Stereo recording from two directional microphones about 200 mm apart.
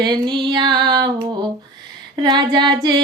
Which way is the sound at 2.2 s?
20° right (ahead or behind).